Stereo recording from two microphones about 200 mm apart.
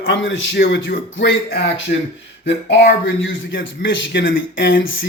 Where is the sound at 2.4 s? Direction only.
60° left (ahead or behind).